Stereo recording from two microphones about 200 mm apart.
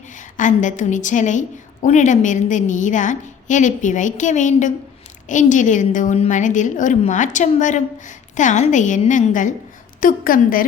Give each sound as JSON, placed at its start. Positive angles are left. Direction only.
{"t": 0.3, "sound": "a woman's voice", "side_deg": 40}